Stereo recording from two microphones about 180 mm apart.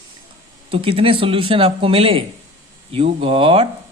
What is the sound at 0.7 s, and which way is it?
Speech, 30° right (ahead or behind).